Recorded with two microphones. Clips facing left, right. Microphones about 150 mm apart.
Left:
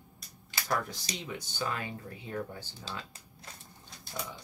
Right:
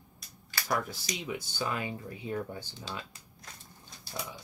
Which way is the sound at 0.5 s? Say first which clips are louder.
Right 1 dB; 20° left (ahead or behind).